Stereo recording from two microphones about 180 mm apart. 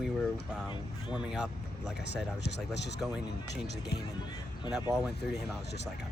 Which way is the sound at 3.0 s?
5° right (ahead or behind).